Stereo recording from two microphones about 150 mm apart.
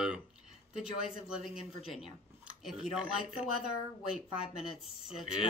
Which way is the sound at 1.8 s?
40° left (ahead or behind).